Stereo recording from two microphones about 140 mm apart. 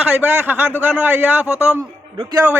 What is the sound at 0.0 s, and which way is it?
Speech, 10° right (ahead or behind).